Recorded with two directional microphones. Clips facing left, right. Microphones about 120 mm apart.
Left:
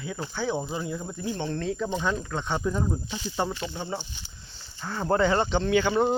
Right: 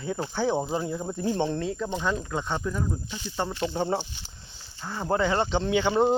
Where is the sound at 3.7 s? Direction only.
40° right (ahead or behind).